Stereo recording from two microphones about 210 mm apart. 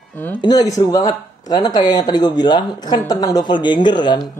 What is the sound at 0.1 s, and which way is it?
Speech, 10° left (ahead or behind).